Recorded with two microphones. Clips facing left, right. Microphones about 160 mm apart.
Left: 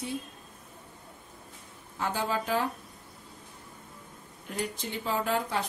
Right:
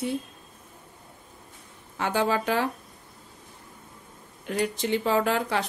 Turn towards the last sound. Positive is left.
turn(degrees=-80)